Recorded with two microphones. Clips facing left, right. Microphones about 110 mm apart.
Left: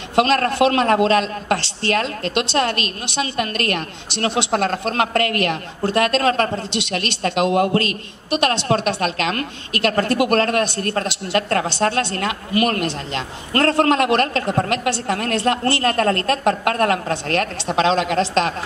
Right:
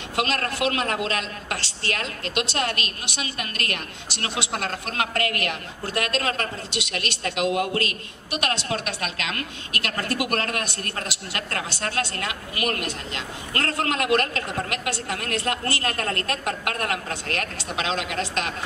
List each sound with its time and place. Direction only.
0.1 s a woman's voice: 30° left (ahead or behind)